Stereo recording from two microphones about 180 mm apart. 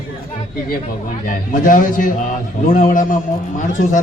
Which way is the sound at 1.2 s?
50° left (ahead or behind).